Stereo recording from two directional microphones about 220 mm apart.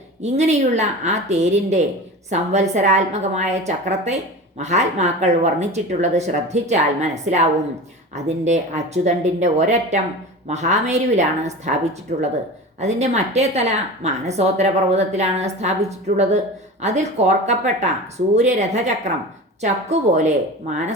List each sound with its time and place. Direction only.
0.2 s a woman's voice: 30° right (ahead or behind)
12.1 s speech: 45° right (ahead or behind)
12.8 s a woman's voice: 30° right (ahead or behind)